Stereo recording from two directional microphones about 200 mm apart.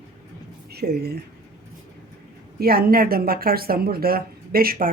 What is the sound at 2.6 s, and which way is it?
Speech, 50° right (ahead or behind).